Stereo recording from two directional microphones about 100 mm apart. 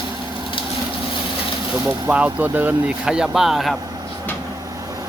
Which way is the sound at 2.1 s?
15° right (ahead or behind).